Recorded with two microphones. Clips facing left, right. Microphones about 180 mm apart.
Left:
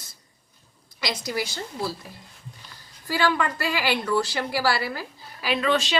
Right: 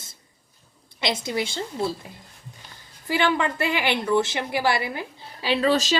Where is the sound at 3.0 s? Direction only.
20° right (ahead or behind).